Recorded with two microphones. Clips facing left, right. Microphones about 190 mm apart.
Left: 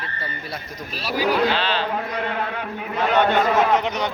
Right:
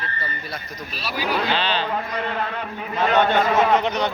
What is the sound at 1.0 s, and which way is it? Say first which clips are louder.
Speech: left 4 dB; 40° left (ahead or behind).